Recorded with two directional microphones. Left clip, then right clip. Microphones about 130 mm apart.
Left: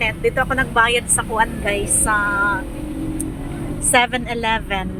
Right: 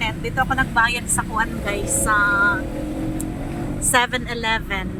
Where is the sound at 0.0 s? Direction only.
25° left (ahead or behind).